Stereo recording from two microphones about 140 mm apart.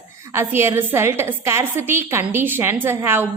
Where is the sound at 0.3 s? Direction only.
15° right (ahead or behind).